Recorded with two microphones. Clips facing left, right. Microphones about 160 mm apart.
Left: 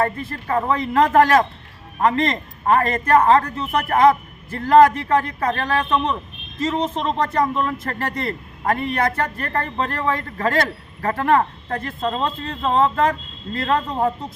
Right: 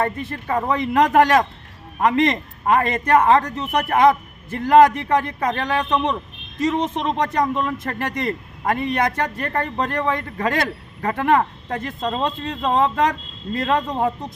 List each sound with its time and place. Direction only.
0.0 s a man's voice: 15° right (ahead or behind)